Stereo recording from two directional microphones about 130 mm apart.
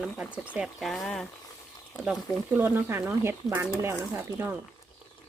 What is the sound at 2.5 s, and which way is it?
Speech, 15° right (ahead or behind).